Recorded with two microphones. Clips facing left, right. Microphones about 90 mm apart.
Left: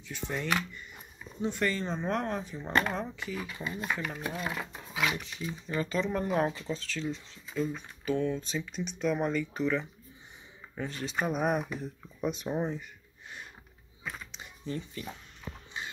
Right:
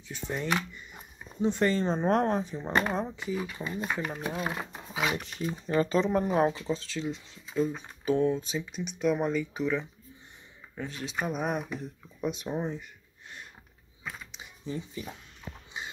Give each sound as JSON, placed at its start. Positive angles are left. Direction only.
{"t": 0.1, "sound": "speech", "side_deg": -20}
{"t": 2.6, "sound": "speech", "side_deg": -15}
{"t": 5.2, "sound": "speech", "side_deg": -45}
{"t": 6.0, "sound": "speech", "side_deg": -20}
{"t": 8.4, "sound": "speech", "side_deg": -10}
{"t": 14.3, "sound": "a sound", "side_deg": -10}